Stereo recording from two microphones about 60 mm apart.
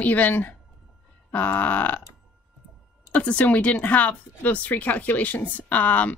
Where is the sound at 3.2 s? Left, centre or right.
Left.